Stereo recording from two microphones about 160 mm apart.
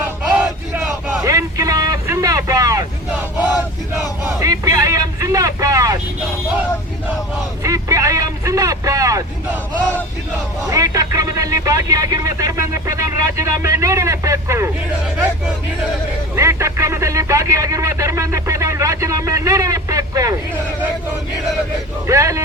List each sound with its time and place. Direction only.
1.2 s vehicle: 20° right (ahead or behind)
4.4 s vehicle: 20° right (ahead or behind)
7.6 s vehicle: 20° right (ahead or behind)
10.7 s speech: 20° right (ahead or behind)
16.3 s speech: 15° right (ahead or behind)
22.0 s speech: 20° right (ahead or behind)